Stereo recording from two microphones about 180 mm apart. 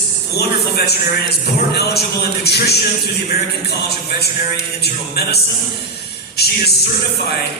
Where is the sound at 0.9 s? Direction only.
65° left (ahead or behind).